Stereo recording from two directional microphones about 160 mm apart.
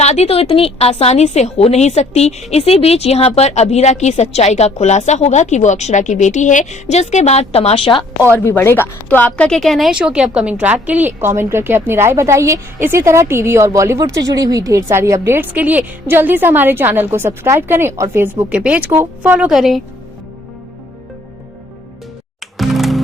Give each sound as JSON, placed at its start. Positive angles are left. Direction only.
{"t": 0.0, "sound": "a woman's voice", "side_deg": 40}
{"t": 8.3, "sound": "a woman's voice", "side_deg": 15}
{"t": 22.5, "sound": "music", "side_deg": 0}